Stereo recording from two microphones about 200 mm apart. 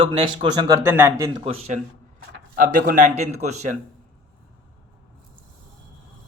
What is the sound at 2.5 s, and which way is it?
A man's voice, 45° right (ahead or behind).